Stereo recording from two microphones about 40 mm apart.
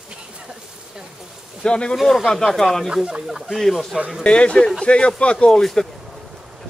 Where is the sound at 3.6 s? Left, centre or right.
Centre.